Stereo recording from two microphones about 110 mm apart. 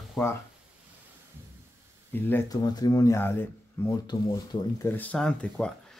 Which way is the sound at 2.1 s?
20° left (ahead or behind).